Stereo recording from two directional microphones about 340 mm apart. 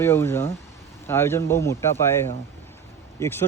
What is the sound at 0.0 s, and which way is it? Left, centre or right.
Speech, centre.